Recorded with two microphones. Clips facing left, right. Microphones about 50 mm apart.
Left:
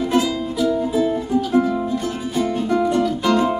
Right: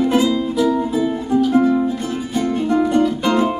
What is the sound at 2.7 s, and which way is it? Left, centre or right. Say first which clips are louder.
Music: right 4 dB; centre.